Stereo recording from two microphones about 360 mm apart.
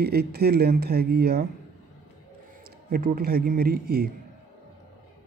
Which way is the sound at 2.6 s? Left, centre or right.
Right.